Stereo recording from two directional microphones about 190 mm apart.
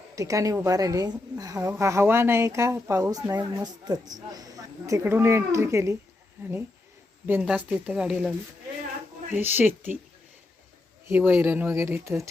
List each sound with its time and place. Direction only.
0.2 s a woman's voice: 15° right (ahead or behind)
7.3 s speech: 10° right (ahead or behind)
9.3 s a woman's voice: 10° right (ahead or behind)
11.1 s a woman's voice: 10° right (ahead or behind)